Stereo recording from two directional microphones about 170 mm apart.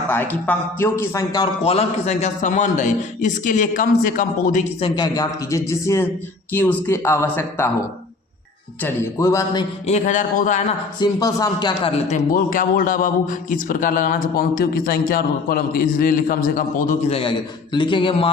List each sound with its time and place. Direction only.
0.1 s a man's voice: 10° left (ahead or behind)
1.6 s a man's voice: 35° left (ahead or behind); by 4.6 s 55° left (ahead or behind)
4.8 s a man's voice: 25° left (ahead or behind)
8.8 s a man's voice: 15° left (ahead or behind)
9.8 s a man's voice: 45° left (ahead or behind)
11.0 s a man's voice: 20° left (ahead or behind); by 17.0 s 50° left (ahead or behind)
17.1 s a man's voice: 35° left (ahead or behind)